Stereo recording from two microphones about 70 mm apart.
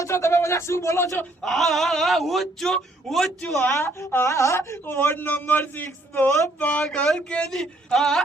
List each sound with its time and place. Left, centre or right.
0.0 s speech: left
1.4 s a man's voice: centre
3.8 s a man's voice: left; by 8.2 s centre